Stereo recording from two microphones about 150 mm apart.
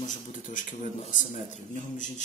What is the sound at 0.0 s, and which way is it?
Speech, 60° left (ahead or behind).